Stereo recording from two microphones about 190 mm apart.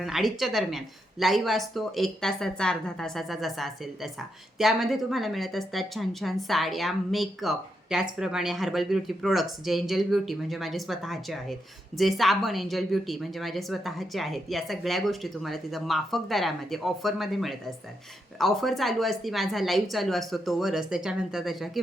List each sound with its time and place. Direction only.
0.0 s speech: centre (ahead or behind)